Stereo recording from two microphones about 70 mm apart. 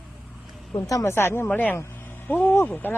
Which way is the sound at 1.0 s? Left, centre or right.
Left.